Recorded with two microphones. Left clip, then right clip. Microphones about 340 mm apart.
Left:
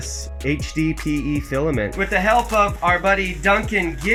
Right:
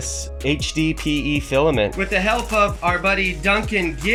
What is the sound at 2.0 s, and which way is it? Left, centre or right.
Speech, centre.